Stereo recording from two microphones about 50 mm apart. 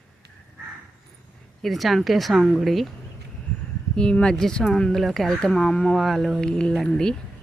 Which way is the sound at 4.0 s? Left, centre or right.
Centre.